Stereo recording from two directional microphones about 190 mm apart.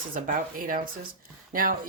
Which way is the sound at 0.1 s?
45° right (ahead or behind).